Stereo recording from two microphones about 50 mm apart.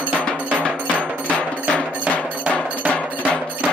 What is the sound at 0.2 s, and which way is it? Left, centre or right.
Music, left.